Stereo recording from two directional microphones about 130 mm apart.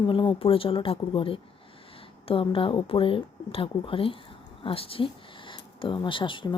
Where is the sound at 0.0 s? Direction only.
40° left (ahead or behind).